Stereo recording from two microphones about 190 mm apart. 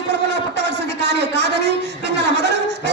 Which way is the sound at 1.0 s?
60° right (ahead or behind).